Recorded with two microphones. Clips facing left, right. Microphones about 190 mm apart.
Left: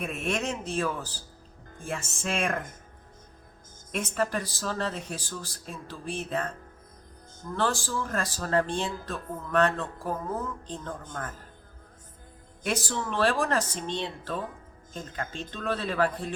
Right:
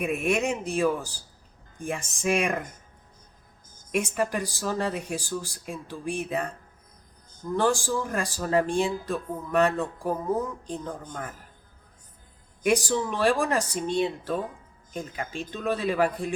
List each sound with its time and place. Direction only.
0.0 s speech: 10° right (ahead or behind)
3.9 s speech: 10° right (ahead or behind)
7.5 s speech: 15° right (ahead or behind)
12.6 s speech: 15° right (ahead or behind)